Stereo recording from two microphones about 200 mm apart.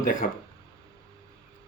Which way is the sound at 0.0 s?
40° left (ahead or behind).